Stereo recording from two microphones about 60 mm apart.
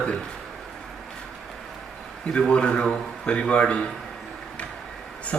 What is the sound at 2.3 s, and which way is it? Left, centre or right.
Speech, centre.